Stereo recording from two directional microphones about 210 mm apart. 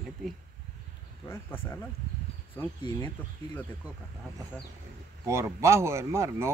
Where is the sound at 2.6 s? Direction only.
10° left (ahead or behind).